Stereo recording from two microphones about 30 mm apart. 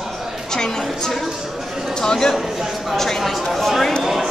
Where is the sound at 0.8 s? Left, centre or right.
Centre.